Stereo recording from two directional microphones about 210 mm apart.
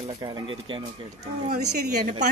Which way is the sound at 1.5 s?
50° right (ahead or behind).